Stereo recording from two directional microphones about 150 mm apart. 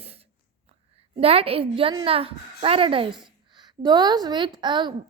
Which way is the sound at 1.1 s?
40° right (ahead or behind).